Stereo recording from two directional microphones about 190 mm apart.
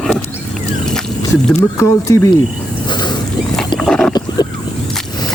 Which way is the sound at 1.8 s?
15° left (ahead or behind).